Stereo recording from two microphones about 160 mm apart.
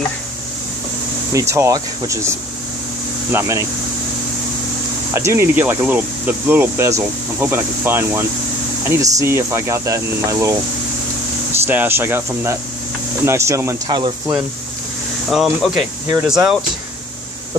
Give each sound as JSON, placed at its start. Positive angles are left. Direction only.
{"t": 1.5, "sound": "speech", "side_deg": -20}
{"t": 5.1, "sound": "speech", "side_deg": -15}
{"t": 11.6, "sound": "speech", "side_deg": -10}
{"t": 15.2, "sound": "speech", "side_deg": 0}